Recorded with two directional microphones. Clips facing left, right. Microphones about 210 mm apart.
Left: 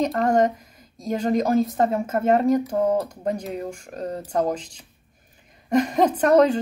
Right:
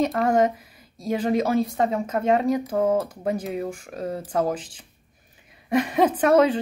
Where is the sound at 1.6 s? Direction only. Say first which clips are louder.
Left 2 dB; centre (ahead or behind).